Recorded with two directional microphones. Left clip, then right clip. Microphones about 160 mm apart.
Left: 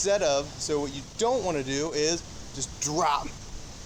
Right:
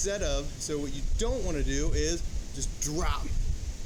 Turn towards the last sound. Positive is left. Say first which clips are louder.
# left 8 dB
turn(degrees=-30)  # may be behind; listen again after turning